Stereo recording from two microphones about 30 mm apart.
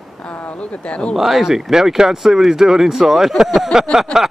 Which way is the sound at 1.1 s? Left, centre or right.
Centre.